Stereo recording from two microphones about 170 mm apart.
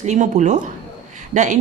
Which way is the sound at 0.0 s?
45° right (ahead or behind).